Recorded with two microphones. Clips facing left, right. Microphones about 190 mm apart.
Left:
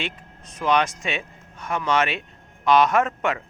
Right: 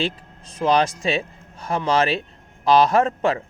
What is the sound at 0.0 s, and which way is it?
Speech, 30° right (ahead or behind).